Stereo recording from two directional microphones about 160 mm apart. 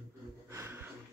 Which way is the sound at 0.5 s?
15° right (ahead or behind).